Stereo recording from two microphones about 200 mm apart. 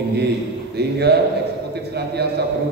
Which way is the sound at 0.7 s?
55° right (ahead or behind).